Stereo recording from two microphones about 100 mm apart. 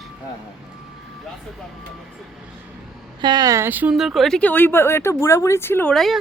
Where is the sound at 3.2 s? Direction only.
45° right (ahead or behind).